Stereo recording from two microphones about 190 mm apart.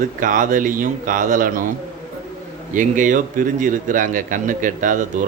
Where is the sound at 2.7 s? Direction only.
45° right (ahead or behind).